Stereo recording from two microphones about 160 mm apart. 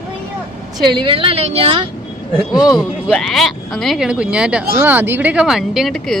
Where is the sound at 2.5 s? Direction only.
25° left (ahead or behind).